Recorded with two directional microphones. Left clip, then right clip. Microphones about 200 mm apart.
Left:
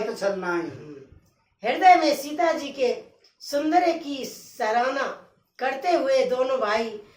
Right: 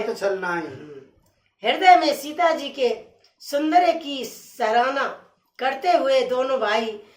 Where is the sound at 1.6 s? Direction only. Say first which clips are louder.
Right 2 dB; 35° right (ahead or behind).